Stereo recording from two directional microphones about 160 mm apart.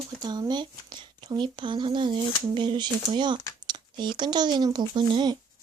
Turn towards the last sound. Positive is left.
turn(degrees=-30)  # may be behind; listen again after turning